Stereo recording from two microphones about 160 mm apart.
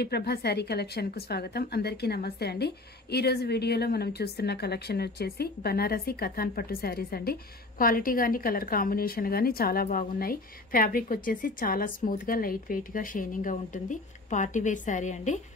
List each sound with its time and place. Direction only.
0.0 s a woman's voice: 90° left; by 15.4 s 50° left (ahead or behind)